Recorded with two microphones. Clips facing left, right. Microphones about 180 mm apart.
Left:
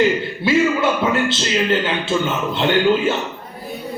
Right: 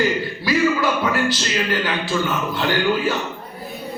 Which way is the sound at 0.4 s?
25° left (ahead or behind).